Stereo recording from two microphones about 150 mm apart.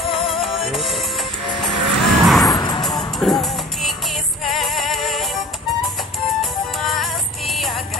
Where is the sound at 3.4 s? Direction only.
Centre (ahead or behind).